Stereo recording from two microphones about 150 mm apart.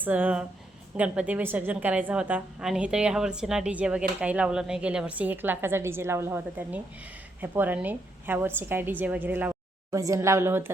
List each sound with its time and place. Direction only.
0.0 s a woman's voice: 10° right (ahead or behind)